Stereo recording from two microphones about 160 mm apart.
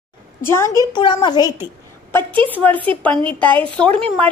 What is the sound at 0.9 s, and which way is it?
Speech, 30° left (ahead or behind).